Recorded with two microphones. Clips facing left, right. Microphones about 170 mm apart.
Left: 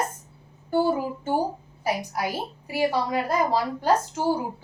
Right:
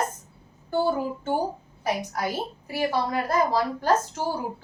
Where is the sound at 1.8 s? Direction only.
10° left (ahead or behind).